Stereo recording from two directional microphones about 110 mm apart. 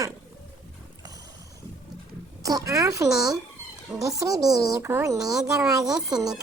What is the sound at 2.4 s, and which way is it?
Speech, 30° right (ahead or behind).